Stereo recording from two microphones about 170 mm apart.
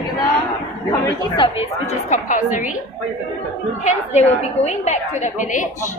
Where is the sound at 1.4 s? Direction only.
40° left (ahead or behind).